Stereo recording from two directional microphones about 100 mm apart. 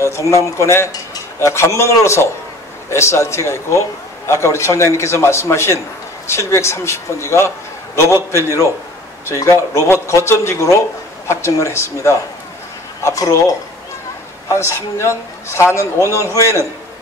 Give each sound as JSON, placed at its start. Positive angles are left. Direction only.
{"t": 0.0, "sound": "a man's voice", "side_deg": 30}